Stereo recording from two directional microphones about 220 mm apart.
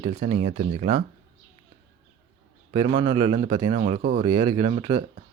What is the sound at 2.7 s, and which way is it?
Speech, 25° right (ahead or behind).